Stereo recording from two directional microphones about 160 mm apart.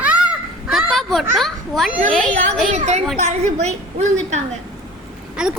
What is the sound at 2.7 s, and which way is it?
A woman's voice, 45° right (ahead or behind).